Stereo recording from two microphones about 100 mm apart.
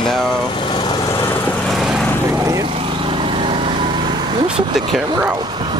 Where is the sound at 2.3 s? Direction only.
30° right (ahead or behind).